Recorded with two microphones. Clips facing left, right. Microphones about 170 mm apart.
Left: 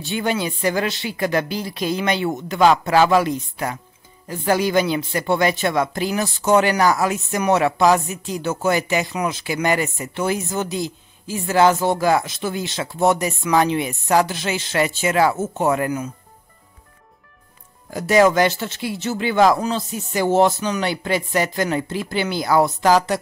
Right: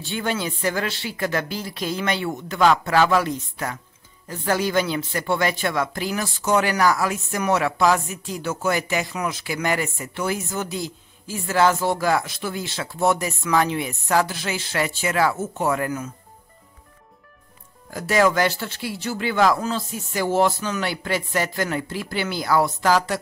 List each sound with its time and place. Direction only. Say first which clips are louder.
0.0 s speech: left 3 dB; 15° left (ahead or behind)
17.9 s speech: left 4 dB; 20° left (ahead or behind)